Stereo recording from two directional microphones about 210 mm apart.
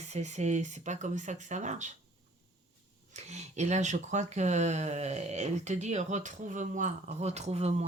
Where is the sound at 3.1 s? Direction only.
35° right (ahead or behind).